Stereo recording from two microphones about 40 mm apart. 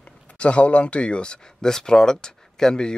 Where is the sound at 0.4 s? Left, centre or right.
Left.